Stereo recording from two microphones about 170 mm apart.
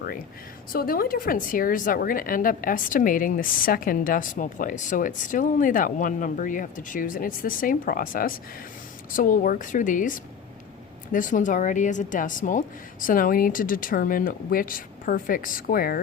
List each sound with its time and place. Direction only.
0.7 s a woman's voice: 60° left (ahead or behind)